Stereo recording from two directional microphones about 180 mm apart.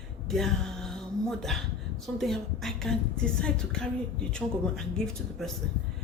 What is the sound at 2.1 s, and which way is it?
A woman's voice, centre (ahead or behind).